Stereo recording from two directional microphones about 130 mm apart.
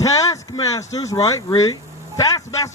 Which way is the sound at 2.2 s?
30° left (ahead or behind).